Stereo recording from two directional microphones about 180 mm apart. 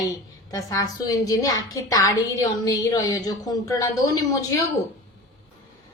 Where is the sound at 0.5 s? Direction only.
20° left (ahead or behind).